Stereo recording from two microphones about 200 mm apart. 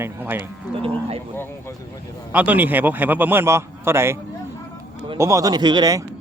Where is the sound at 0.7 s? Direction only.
30° right (ahead or behind).